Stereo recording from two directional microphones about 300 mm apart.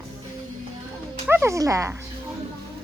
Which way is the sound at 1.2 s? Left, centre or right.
Centre.